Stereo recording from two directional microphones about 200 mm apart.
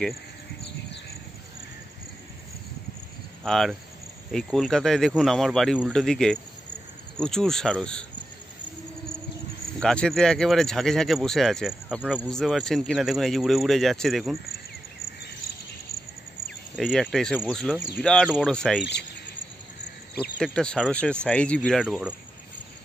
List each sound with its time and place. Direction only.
3.4 s speech: centre (ahead or behind)
9.8 s speech: 5° left (ahead or behind)
16.7 s speech: centre (ahead or behind)
20.3 s speech: 5° left (ahead or behind)